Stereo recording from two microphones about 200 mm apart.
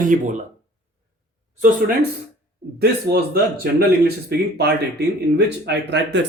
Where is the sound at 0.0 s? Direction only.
40° right (ahead or behind).